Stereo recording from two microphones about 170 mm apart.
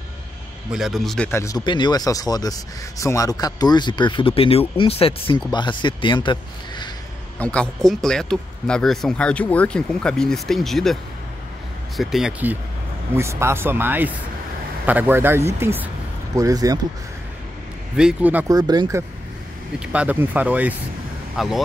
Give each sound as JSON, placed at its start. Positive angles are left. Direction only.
{"t": 0.7, "sound": "speech", "side_deg": 0}
{"t": 1.3, "sound": "speech", "side_deg": 20}
{"t": 7.3, "sound": "speech", "side_deg": 5}
{"t": 12.0, "sound": "speech", "side_deg": 0}
{"t": 17.9, "sound": "speech", "side_deg": -5}
{"t": 18.5, "sound": "speech", "side_deg": -20}
{"t": 19.9, "sound": "speech", "side_deg": -10}